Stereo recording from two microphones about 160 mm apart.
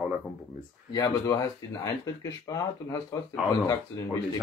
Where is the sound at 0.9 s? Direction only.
20° left (ahead or behind).